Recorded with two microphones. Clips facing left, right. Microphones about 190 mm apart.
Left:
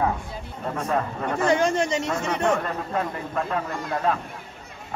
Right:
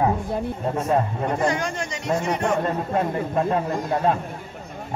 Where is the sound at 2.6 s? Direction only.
30° right (ahead or behind).